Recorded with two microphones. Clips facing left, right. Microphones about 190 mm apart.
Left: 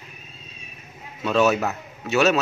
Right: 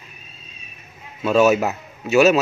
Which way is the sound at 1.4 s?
15° right (ahead or behind).